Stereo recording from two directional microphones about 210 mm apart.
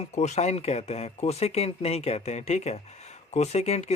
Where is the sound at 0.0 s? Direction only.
35° left (ahead or behind).